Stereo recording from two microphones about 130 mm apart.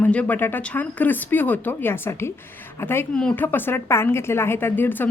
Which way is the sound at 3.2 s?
5° left (ahead or behind).